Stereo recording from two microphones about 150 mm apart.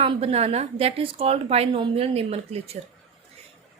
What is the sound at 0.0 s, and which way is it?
A woman's voice, 40° right (ahead or behind).